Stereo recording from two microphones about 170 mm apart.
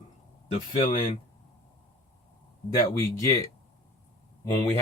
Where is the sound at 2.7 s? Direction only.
20° left (ahead or behind).